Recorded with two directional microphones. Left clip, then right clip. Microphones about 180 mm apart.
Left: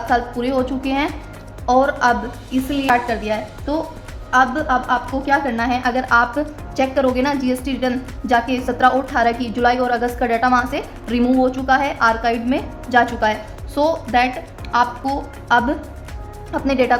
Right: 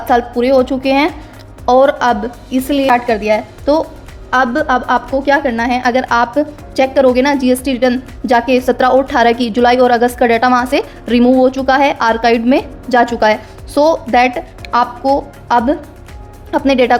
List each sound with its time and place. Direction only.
0.1 s a woman's voice: 35° right (ahead or behind)